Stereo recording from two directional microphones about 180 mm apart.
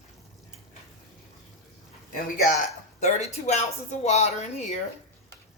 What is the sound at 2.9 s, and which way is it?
Speech, 40° left (ahead or behind).